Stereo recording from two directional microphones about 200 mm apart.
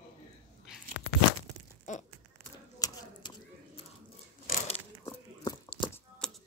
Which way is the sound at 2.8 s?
20° left (ahead or behind).